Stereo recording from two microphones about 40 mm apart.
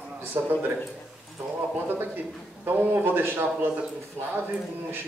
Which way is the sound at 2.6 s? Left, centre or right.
Right.